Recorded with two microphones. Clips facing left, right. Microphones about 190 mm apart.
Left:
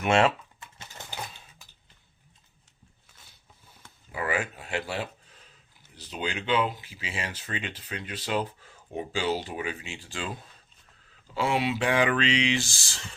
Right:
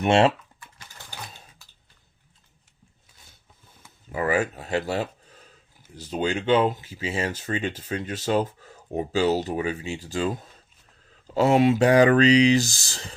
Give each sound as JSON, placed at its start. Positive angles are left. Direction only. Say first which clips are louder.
{"t": 0.0, "sound": "speech", "louder": "right 4 dB", "side_deg": -35}
{"t": 0.6, "sound": "sewing machine", "louder": "left 3 dB", "side_deg": 25}
{"t": 4.1, "sound": "speech", "louder": "right 6 dB", "side_deg": -40}